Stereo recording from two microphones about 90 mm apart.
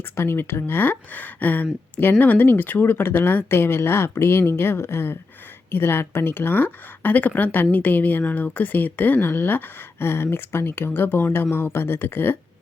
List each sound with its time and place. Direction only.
0.2 s a woman's voice: 25° left (ahead or behind)